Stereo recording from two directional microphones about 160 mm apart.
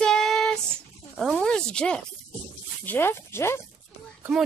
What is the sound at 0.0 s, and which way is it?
Child singing, 5° left (ahead or behind).